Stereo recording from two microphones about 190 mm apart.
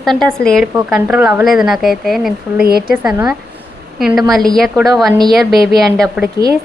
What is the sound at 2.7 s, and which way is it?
Speech, 55° right (ahead or behind).